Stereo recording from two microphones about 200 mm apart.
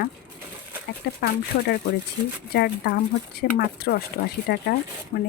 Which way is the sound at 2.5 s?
55° left (ahead or behind).